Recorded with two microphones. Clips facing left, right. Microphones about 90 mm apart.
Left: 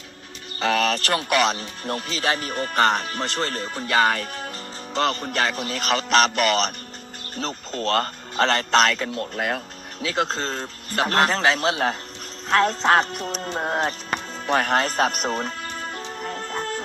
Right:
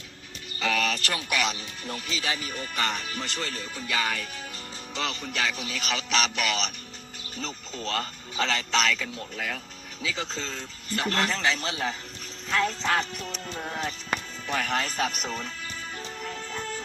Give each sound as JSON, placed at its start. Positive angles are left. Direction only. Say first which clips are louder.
{"t": 0.6, "sound": "speech", "louder": "left 6 dB", "side_deg": 45}
{"t": 10.2, "sound": "speech", "louder": "left 9 dB", "side_deg": 45}
{"t": 15.6, "sound": "music", "louder": "left 6 dB", "side_deg": 50}